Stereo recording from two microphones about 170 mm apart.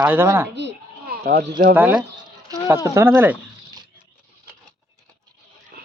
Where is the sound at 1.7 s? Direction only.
10° right (ahead or behind).